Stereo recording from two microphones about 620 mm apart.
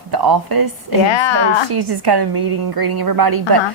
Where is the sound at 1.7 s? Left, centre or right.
Right.